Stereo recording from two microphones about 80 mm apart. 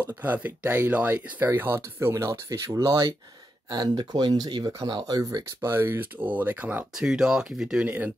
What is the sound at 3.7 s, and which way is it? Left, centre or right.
Speech, right.